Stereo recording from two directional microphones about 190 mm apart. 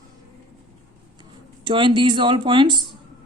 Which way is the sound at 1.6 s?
25° right (ahead or behind).